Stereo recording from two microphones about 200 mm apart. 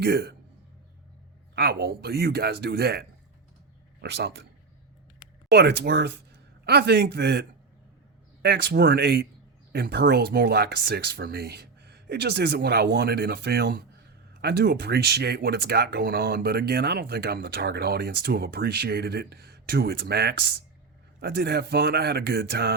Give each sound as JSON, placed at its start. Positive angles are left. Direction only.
{"t": 0.0, "sound": "speech", "side_deg": -55}
{"t": 1.5, "sound": "a man's voice", "side_deg": -55}
{"t": 5.5, "sound": "speech", "side_deg": -55}